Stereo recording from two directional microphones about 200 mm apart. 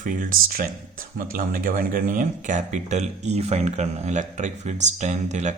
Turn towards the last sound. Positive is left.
turn(degrees=-35)  # may be behind; listen again after turning